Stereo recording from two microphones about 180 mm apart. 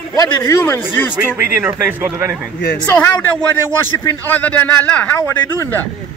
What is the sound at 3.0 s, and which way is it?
A man's voice, 10° left (ahead or behind).